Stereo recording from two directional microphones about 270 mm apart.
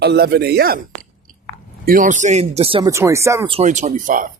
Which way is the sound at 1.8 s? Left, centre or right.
Right.